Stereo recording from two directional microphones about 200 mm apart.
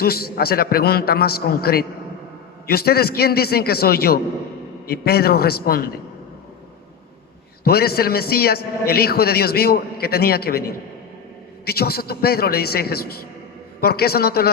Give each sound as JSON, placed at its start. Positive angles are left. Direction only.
{"t": 0.0, "sound": "a man's voice", "side_deg": 50}
{"t": 7.6, "sound": "a man's voice", "side_deg": 50}
{"t": 11.6, "sound": "a man's voice", "side_deg": 50}